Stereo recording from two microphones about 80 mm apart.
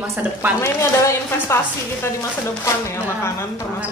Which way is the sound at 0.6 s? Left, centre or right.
Left.